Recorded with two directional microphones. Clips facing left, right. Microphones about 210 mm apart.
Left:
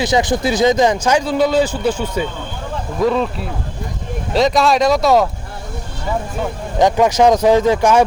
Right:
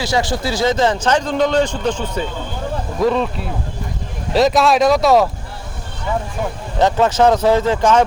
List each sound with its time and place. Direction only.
0.0 s speech: 20° left (ahead or behind); by 5.3 s centre (ahead or behind)
6.7 s speech: 15° left (ahead or behind)